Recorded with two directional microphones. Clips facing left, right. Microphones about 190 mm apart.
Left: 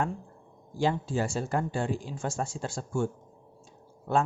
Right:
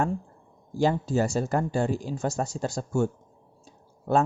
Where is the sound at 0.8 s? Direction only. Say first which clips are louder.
Right 4 dB; 40° right (ahead or behind).